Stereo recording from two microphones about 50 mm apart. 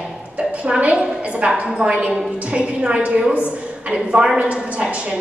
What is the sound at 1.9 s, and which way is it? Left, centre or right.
A woman's voice, right.